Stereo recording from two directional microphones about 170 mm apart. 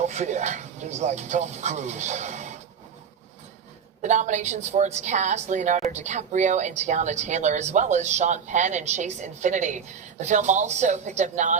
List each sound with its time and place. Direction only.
0.0 s a woman's voice: 45° right (ahead or behind)
4.0 s a woman's voice: 45° right (ahead or behind)